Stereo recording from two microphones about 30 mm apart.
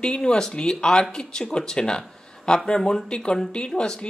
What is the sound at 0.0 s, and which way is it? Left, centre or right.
Speech, left.